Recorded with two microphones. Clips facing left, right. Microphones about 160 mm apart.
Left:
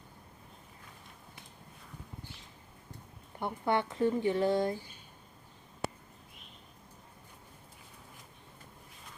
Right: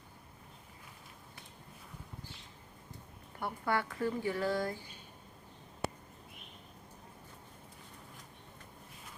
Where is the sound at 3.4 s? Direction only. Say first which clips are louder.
Left 3 dB; 20° left (ahead or behind).